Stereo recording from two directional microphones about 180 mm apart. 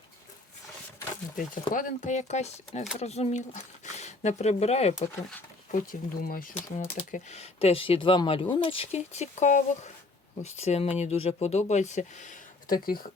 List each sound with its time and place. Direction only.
1.7 s speech: 45° left (ahead or behind)
5.7 s speech: 50° left (ahead or behind)
7.1 s speech: 40° left (ahead or behind); by 13.1 s 55° left (ahead or behind)